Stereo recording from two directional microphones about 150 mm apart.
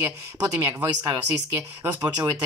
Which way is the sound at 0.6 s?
15° right (ahead or behind).